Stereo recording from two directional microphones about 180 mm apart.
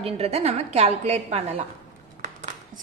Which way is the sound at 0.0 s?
35° right (ahead or behind).